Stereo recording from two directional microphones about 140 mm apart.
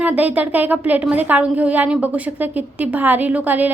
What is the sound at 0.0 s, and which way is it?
Speech, 10° right (ahead or behind).